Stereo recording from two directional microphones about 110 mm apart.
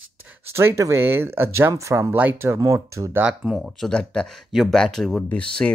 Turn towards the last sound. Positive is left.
turn(degrees=10)  # may be behind; listen again after turning